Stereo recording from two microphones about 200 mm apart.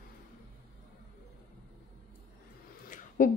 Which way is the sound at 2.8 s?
45° left (ahead or behind).